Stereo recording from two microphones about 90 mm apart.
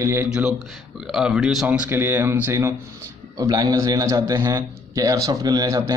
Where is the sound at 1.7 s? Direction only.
20° right (ahead or behind).